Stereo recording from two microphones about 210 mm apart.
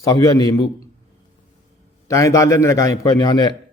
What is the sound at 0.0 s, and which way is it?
Speech, 15° left (ahead or behind).